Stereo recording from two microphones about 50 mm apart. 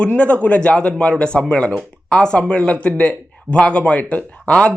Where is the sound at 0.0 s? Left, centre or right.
Left.